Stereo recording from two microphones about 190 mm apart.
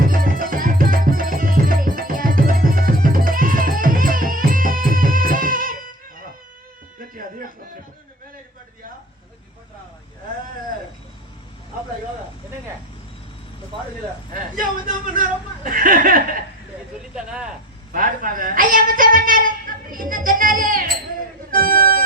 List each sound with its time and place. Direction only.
0.0 s music: 45° right (ahead or behind)
7.1 s music: 45° right (ahead or behind)
14.3 s a sound: 45° right (ahead or behind)
17.2 s vehicle: 5° right (ahead or behind)
17.9 s a sound: 45° right (ahead or behind)
21.5 s music: 50° right (ahead or behind)